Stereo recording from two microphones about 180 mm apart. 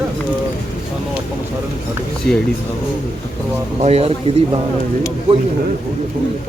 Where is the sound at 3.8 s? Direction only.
35° right (ahead or behind).